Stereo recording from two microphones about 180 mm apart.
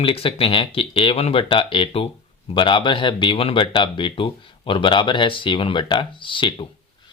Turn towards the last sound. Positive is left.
turn(degrees=30)  # may be behind; listen again after turning